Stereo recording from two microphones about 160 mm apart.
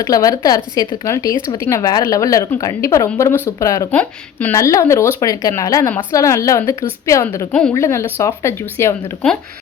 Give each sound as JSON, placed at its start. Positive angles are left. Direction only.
{"t": 0.0, "sound": "a woman's voice", "side_deg": 20}
{"t": 3.9, "sound": "a woman's voice", "side_deg": 10}